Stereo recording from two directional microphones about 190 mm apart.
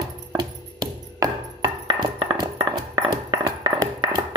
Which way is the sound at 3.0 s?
20° right (ahead or behind).